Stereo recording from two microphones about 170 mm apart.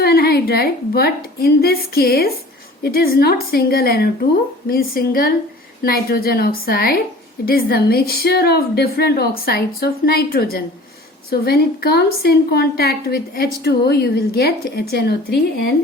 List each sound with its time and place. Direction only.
0.0 s a woman's voice: 65° left (ahead or behind)